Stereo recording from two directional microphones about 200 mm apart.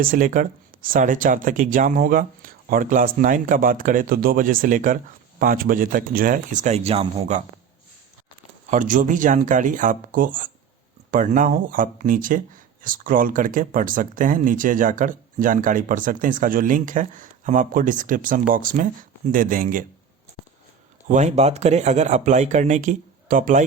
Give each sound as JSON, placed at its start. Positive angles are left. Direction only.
{"t": 0.0, "sound": "speech", "side_deg": -45}
{"t": 8.7, "sound": "speech", "side_deg": -40}
{"t": 21.1, "sound": "speech", "side_deg": -35}